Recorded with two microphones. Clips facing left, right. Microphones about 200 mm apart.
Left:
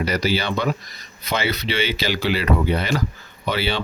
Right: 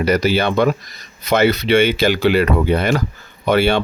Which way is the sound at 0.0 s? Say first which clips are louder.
Right 6 dB; 50° right (ahead or behind).